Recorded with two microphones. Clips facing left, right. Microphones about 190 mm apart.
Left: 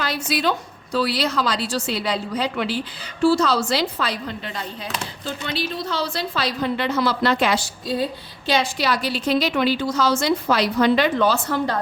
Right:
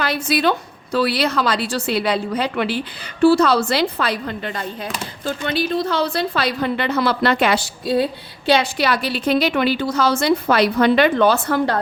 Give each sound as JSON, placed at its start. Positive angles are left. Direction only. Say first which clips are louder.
{"t": 0.0, "sound": "a woman's voice", "louder": "right 4 dB", "side_deg": -60}